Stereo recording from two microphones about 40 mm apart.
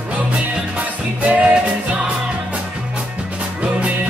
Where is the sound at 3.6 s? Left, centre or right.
Right.